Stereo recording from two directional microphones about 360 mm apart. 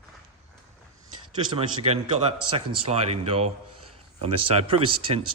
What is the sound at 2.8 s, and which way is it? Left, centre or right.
Speech, centre.